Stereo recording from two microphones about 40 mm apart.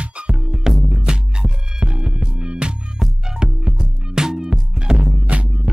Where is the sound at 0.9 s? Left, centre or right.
Centre.